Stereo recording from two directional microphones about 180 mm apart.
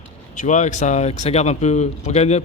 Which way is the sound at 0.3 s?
45° left (ahead or behind).